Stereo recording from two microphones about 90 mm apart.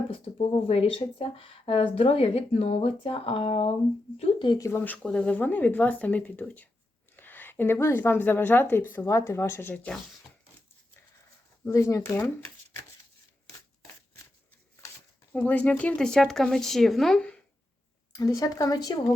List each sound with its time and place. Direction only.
0.1 s speech: 90° left
4.2 s speech: 65° left (ahead or behind)
4.5 s speech: 35° left (ahead or behind)
5.0 s a woman's voice: 10° left (ahead or behind)
11.7 s speech: 35° left (ahead or behind)
15.3 s speech: 20° left (ahead or behind)
18.2 s speech: 45° left (ahead or behind)